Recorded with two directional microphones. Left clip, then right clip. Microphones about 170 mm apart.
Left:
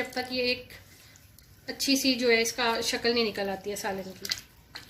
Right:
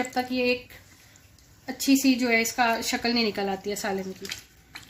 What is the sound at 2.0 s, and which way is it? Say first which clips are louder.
A woman's voice: right 1 dB; 55° right (ahead or behind).